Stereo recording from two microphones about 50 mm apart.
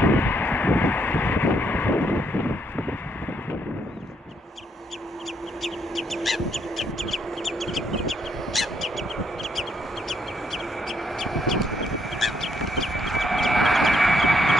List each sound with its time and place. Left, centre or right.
0.0 s vehicle: left
5.6 s crow: centre